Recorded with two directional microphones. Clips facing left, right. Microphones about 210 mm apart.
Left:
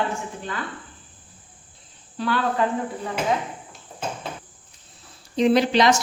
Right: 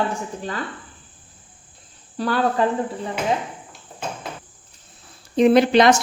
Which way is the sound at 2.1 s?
40° right (ahead or behind).